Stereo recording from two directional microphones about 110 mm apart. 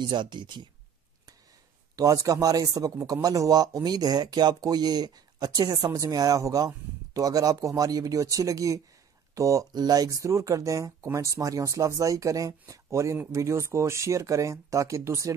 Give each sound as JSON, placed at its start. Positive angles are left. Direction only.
{"t": 0.1, "sound": "speech", "side_deg": -45}
{"t": 2.0, "sound": "speech", "side_deg": -30}